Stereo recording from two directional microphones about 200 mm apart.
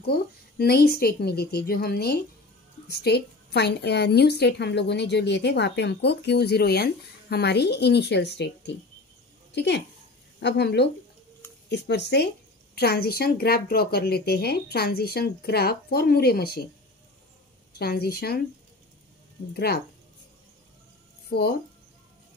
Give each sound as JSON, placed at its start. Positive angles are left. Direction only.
{"t": 0.0, "sound": "a woman's voice", "side_deg": 50}
{"t": 17.7, "sound": "speech", "side_deg": 50}
{"t": 19.5, "sound": "speech", "side_deg": 50}
{"t": 21.3, "sound": "speech", "side_deg": 50}